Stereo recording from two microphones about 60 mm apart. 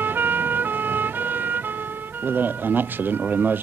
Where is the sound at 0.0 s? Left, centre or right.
Right.